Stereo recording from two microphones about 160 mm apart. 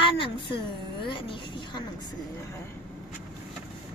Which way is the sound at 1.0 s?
30° left (ahead or behind).